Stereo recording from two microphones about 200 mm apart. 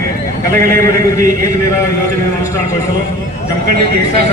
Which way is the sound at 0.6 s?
45° right (ahead or behind).